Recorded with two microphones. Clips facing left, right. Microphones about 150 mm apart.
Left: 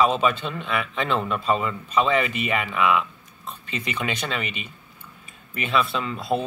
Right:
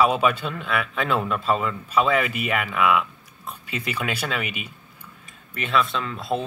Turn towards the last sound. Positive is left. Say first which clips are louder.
# left 1 dB
turn(degrees=0)  # may be behind; listen again after turning